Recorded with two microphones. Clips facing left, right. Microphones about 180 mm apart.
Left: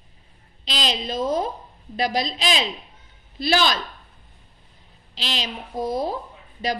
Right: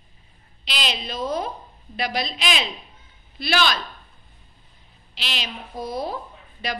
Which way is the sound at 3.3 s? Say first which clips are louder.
Left 2 dB; 40° left (ahead or behind).